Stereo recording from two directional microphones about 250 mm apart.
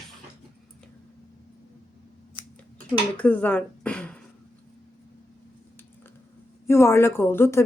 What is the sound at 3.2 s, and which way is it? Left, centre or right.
Speech, centre.